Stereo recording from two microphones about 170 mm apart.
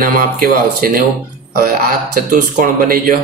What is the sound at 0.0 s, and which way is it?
Speech, 55° right (ahead or behind).